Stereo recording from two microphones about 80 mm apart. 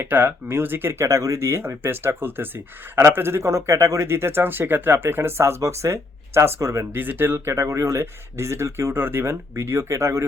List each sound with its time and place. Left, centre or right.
0.0 s speech: right
6.9 s speech: right